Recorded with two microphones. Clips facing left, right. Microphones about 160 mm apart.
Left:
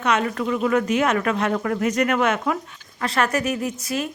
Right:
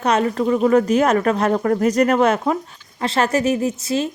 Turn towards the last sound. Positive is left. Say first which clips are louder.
# right 5 dB
turn(degrees=-30)  # may be behind; listen again after turning